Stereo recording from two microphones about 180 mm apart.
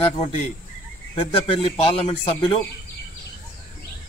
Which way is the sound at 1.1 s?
30° left (ahead or behind).